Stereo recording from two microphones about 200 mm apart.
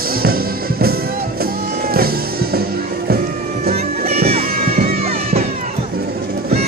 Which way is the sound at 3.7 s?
30° right (ahead or behind).